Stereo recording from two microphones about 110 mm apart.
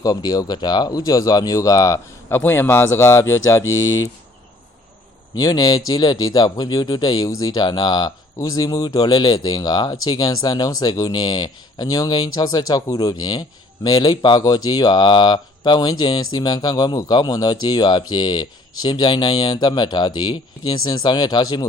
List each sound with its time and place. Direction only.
0.0 s speech: 40° left (ahead or behind)
2.3 s speech: 20° left (ahead or behind)
5.4 s speech: 35° left (ahead or behind)